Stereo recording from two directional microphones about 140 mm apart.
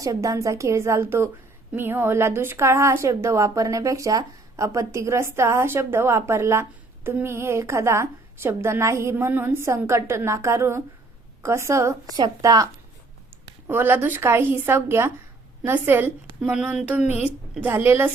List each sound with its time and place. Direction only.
0.0 s a woman's voice: 25° right (ahead or behind)